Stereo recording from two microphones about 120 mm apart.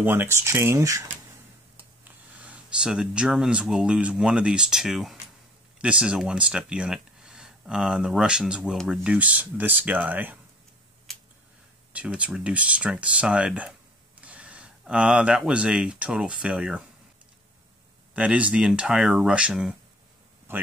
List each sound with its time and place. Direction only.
0.0 s speech: 15° right (ahead or behind)
2.0 s speech: 10° right (ahead or behind)
11.9 s speech: 10° right (ahead or behind)
18.1 s speech: 10° right (ahead or behind)